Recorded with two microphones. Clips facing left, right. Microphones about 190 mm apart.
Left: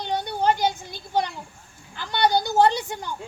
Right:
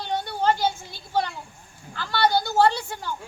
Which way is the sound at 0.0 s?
20° left (ahead or behind).